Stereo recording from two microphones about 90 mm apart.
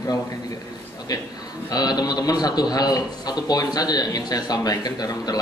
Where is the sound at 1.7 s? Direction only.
45° left (ahead or behind).